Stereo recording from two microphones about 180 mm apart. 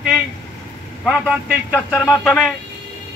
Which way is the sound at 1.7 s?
10° left (ahead or behind).